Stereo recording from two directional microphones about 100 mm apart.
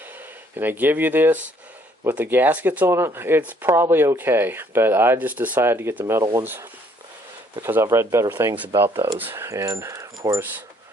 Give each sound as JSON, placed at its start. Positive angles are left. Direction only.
{"t": 0.5, "sound": "speech", "side_deg": -20}